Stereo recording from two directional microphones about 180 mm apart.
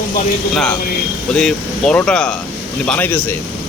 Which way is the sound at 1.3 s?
5° left (ahead or behind).